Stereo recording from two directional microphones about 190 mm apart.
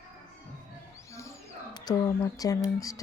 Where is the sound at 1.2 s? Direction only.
20° left (ahead or behind).